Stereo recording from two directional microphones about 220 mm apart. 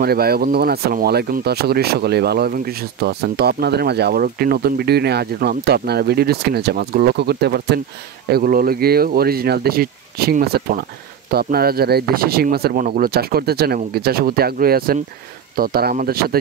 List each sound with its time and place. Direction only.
0.0 s speech: 45° right (ahead or behind)